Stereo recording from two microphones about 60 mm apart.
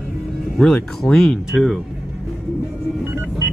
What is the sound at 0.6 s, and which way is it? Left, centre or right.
Speech, centre.